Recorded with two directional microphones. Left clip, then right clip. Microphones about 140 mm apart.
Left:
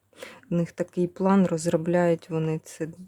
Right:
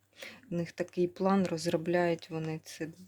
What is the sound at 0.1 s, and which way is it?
Speech, 45° left (ahead or behind).